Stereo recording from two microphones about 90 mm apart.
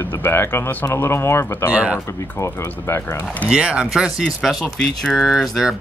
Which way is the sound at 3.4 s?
10° right (ahead or behind).